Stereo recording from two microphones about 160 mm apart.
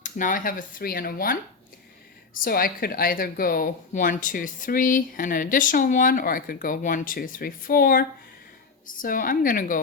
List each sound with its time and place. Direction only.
0.0 s a woman's voice: 55° left (ahead or behind)